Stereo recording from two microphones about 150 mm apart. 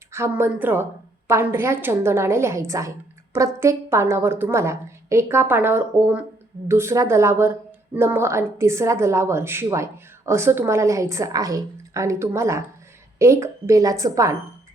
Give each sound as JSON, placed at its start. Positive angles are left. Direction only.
{"t": 0.3, "sound": "a woman's voice", "side_deg": -15}